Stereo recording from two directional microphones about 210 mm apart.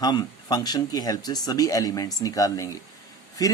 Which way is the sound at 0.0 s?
20° left (ahead or behind).